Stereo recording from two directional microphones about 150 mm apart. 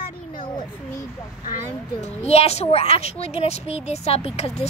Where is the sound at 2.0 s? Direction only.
45° left (ahead or behind).